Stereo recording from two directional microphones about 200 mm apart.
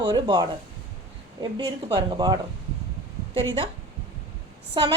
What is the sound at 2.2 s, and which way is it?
Speech, 20° right (ahead or behind).